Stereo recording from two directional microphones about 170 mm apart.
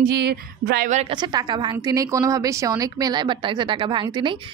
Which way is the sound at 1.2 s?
25° right (ahead or behind).